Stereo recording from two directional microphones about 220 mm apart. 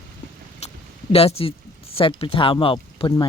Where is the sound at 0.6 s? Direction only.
30° left (ahead or behind).